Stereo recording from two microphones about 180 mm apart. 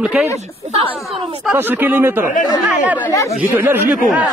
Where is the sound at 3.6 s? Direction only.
10° right (ahead or behind).